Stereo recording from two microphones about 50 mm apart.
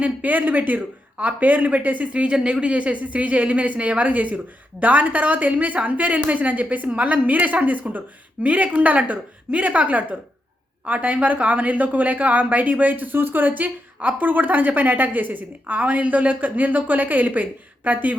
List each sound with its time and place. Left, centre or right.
0.0 s a woman's voice: right